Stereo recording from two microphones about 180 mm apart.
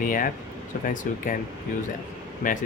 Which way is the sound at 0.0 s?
50° left (ahead or behind).